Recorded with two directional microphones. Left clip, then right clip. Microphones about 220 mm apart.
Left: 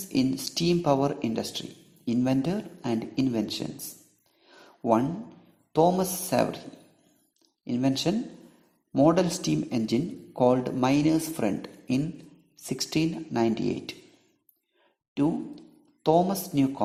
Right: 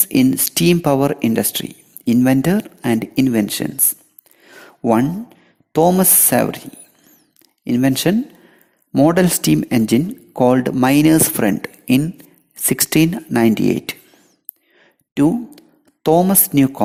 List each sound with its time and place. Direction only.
0.1 s speech: 45° right (ahead or behind)
4.4 s a sound: 40° right (ahead or behind)
5.7 s speech: 40° right (ahead or behind)
7.6 s speech: 40° right (ahead or behind)
15.1 s speech: 40° right (ahead or behind)